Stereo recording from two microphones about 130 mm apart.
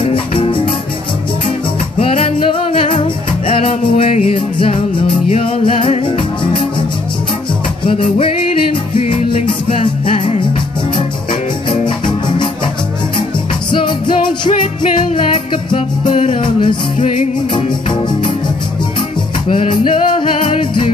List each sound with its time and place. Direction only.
0.0 s music: 45° left (ahead or behind)
2.0 s music: 45° left (ahead or behind)
7.8 s music: 45° left (ahead or behind)
11.7 s music: 35° left (ahead or behind)
13.7 s music: 35° left (ahead or behind)
17.0 s music: 65° left (ahead or behind)
19.5 s music: 45° left (ahead or behind)